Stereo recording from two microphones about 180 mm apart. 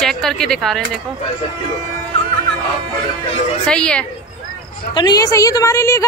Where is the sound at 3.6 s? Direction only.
5° left (ahead or behind).